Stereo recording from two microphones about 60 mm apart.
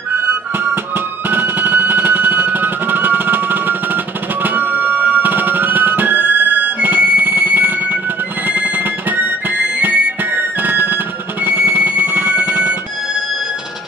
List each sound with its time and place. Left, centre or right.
0.9 s music: right